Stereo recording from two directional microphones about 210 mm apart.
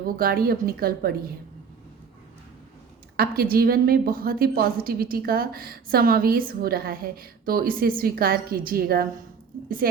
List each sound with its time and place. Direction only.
0.0 s a woman's voice: 45° right (ahead or behind)
3.2 s a woman's voice: 45° right (ahead or behind)